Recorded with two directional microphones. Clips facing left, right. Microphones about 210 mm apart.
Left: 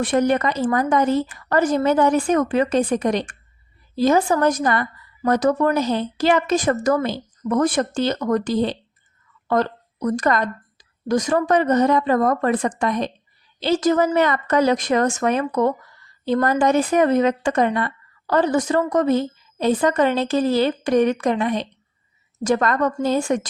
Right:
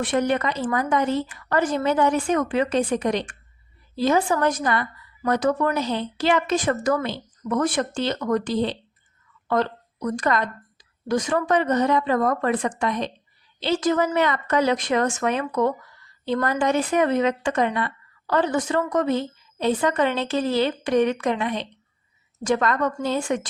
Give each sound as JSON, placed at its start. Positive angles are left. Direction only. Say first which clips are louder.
{"t": 0.0, "sound": "a woman's voice", "louder": "left 4 dB", "side_deg": 40}